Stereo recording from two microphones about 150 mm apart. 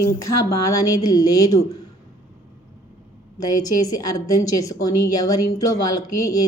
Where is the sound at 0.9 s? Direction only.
25° left (ahead or behind).